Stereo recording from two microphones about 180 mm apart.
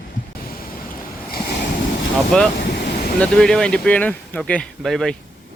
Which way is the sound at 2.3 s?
5° left (ahead or behind).